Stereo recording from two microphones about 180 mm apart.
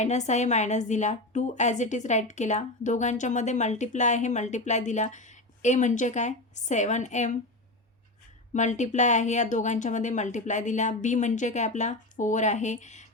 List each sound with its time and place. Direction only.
0.0 s a woman's voice: 40° left (ahead or behind)
8.5 s a woman's voice: 40° left (ahead or behind)